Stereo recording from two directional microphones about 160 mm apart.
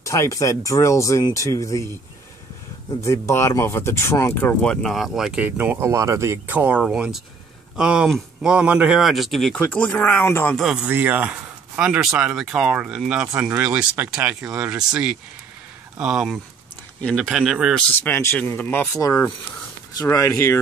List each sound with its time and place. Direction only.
0.0 s speech: 20° left (ahead or behind)
3.0 s speech: 20° left (ahead or behind)
10.5 s speech: centre (ahead or behind)
10.9 s speech: 10° right (ahead or behind)
17.9 s speech: 15° left (ahead or behind)